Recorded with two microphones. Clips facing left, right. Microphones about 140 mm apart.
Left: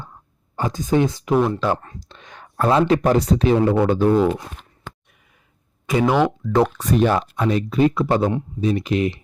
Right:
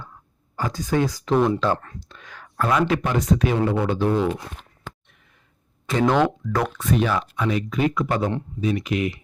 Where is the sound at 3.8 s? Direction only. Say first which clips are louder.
Left 5 dB; 45° left (ahead or behind).